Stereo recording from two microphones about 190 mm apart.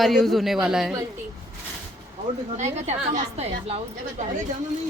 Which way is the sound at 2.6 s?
35° right (ahead or behind).